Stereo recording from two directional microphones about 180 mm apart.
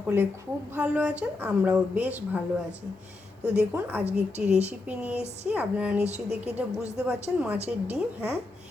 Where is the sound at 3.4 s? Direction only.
5° right (ahead or behind).